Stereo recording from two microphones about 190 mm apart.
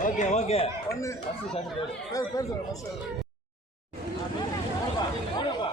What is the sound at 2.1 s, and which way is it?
Speech, 20° left (ahead or behind).